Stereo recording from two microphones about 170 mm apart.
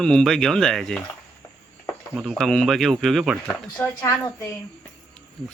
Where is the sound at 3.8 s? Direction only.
10° left (ahead or behind).